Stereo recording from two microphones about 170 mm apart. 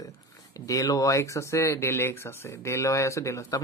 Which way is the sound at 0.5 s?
20° left (ahead or behind).